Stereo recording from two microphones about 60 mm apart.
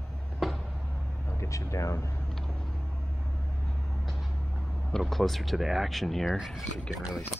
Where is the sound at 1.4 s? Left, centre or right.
Left.